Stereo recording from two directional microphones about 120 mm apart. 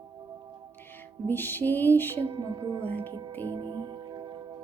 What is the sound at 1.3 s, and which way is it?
Music, 15° left (ahead or behind).